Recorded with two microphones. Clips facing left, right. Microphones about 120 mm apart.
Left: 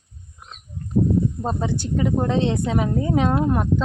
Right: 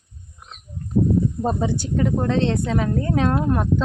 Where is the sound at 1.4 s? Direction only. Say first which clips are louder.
Right 2 dB; 10° right (ahead or behind).